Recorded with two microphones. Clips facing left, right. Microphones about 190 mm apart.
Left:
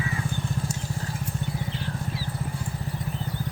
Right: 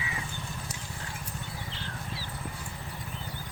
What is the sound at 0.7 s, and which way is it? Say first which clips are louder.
Vehicle: left 9 dB; 35° left (ahead or behind).